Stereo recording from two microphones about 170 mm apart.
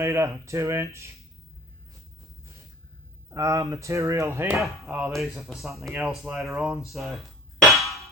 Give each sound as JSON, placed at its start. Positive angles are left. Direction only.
{"t": 0.0, "sound": "speech", "side_deg": -15}
{"t": 3.3, "sound": "speech", "side_deg": -20}
{"t": 4.6, "sound": "speech", "side_deg": 0}
{"t": 6.8, "sound": "dishes", "side_deg": 0}